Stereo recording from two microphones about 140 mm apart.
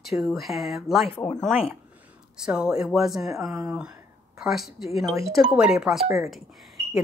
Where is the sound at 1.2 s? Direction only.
25° left (ahead or behind).